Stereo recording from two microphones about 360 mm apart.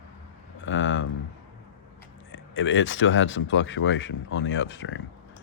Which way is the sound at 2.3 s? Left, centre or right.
Left.